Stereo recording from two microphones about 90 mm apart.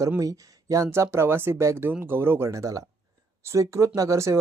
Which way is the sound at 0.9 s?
30° right (ahead or behind).